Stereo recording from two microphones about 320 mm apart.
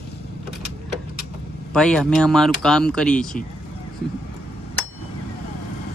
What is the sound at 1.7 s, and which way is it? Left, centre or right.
Speech, centre.